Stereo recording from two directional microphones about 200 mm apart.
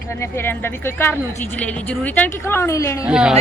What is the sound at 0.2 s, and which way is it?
Speech, 10° left (ahead or behind).